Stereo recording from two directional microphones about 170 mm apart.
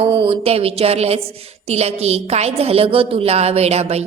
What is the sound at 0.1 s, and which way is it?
A woman's voice, 30° right (ahead or behind).